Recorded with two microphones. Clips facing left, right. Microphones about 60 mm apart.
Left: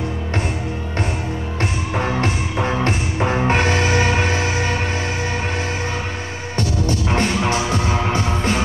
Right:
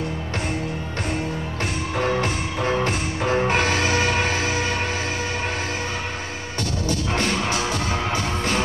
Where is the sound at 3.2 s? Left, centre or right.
Left.